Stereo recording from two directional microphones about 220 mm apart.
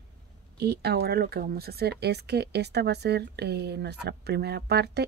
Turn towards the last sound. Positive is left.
turn(degrees=-50)  # may be behind; listen again after turning